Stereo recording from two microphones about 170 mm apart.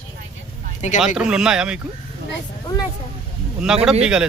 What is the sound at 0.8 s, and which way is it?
Speech, 45° left (ahead or behind).